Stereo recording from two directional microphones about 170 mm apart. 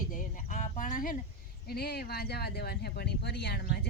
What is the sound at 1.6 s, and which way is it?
Speech, 70° left (ahead or behind).